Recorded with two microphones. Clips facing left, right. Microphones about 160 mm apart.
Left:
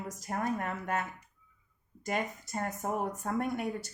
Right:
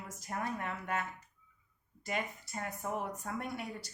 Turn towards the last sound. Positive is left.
turn(degrees=50)  # may be behind; listen again after turning